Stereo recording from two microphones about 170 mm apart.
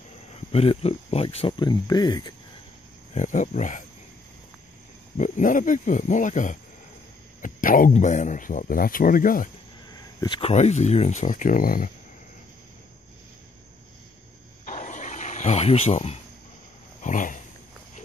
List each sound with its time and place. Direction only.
0.5 s speech: 35° left (ahead or behind)
3.2 s speech: 45° left (ahead or behind)
5.1 s speech: 50° left (ahead or behind)
10.2 s speech: 25° left (ahead or behind)
10.5 s speech: 40° left (ahead or behind)
14.6 s a sound: 50° left (ahead or behind)
17.0 s a sound: 50° left (ahead or behind)